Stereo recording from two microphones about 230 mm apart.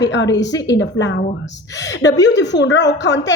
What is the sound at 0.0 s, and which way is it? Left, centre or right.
A woman's voice, left.